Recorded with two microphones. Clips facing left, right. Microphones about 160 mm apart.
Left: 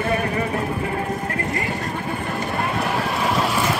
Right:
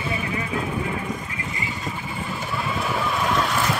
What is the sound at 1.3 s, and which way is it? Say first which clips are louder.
Music: left 7 dB; 55° left (ahead or behind).